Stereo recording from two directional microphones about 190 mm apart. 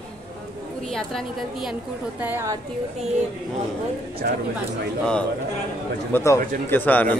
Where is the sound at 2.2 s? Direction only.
10° right (ahead or behind).